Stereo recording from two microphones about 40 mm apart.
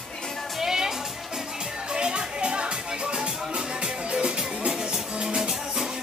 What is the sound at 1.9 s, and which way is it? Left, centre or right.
Music, right.